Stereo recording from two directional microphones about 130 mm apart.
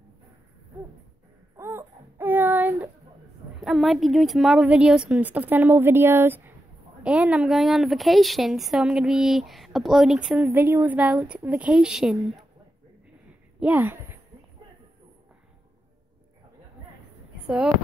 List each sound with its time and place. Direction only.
1.6 s a sound: 15° right (ahead or behind)
3.6 s a woman's voice: centre (ahead or behind)
13.7 s speech: 15° right (ahead or behind)